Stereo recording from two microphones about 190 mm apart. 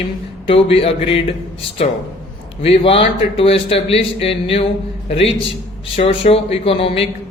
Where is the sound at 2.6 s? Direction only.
30° left (ahead or behind).